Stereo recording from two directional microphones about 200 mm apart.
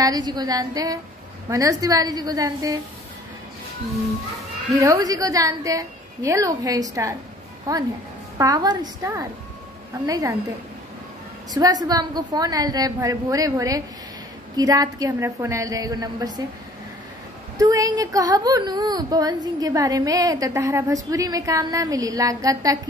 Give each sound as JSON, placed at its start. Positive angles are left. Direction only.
{"t": 0.0, "sound": "a woman's voice", "side_deg": -20}
{"t": 4.7, "sound": "speech", "side_deg": -15}
{"t": 11.5, "sound": "a woman's voice", "side_deg": -20}
{"t": 17.6, "sound": "speech", "side_deg": -20}